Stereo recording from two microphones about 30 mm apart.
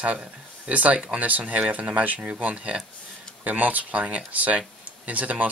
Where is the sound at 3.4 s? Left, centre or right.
Right.